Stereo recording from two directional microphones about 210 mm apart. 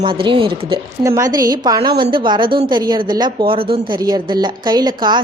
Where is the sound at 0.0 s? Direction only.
25° right (ahead or behind).